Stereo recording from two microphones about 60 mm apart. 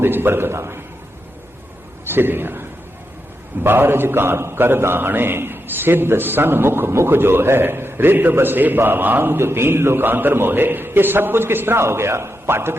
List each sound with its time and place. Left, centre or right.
0.0 s a man's voice: right
2.0 s a man's voice: right